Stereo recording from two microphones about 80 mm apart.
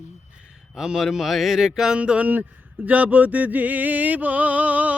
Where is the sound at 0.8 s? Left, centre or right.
Centre.